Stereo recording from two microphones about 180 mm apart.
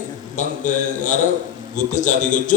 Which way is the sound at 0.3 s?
45° left (ahead or behind).